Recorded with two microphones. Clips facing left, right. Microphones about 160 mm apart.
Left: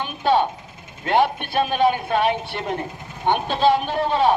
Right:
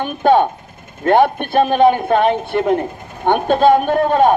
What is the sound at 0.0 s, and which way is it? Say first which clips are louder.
A man's voice: right 6 dB; 50° right (ahead or behind).